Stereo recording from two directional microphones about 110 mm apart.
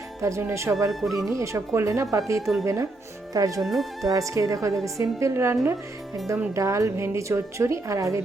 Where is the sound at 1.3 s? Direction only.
25° right (ahead or behind).